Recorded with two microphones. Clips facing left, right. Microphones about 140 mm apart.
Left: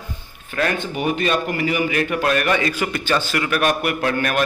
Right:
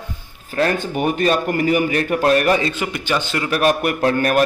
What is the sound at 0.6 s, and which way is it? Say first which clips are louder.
A man's voice: right 3 dB; 40° right (ahead or behind).